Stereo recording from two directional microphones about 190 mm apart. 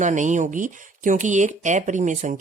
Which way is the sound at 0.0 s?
40° right (ahead or behind).